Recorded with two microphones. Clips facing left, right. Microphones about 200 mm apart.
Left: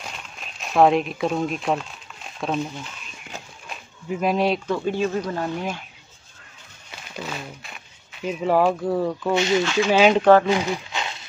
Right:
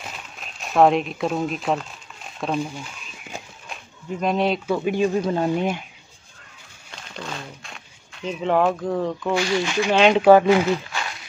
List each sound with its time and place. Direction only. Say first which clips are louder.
0.0 s speech: even; centre (ahead or behind)
7.2 s speech: left 1 dB; 5° left (ahead or behind)
9.3 s speech: left 2 dB; 20° left (ahead or behind)
9.8 s speech: even; 5° left (ahead or behind)
10.2 s speech: right 5 dB; 10° right (ahead or behind)
10.5 s a sound: right 4 dB; 20° left (ahead or behind)